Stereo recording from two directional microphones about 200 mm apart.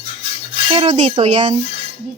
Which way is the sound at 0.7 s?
30° right (ahead or behind).